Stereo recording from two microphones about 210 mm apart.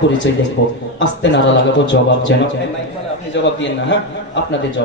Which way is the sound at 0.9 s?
60° left (ahead or behind).